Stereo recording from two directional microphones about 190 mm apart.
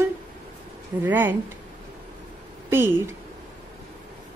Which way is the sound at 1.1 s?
10° right (ahead or behind).